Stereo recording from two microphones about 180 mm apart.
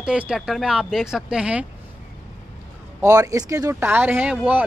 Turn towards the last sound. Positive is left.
turn(degrees=-10)  # may be behind; listen again after turning